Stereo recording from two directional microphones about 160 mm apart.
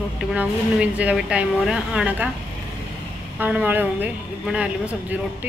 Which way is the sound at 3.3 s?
10° right (ahead or behind).